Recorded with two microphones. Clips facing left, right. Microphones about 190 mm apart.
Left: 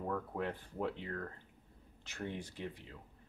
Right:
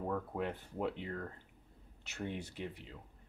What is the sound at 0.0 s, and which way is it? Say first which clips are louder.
Speech: right 1 dB; 10° right (ahead or behind).